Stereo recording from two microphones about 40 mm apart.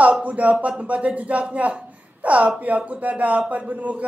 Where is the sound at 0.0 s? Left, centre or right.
Right.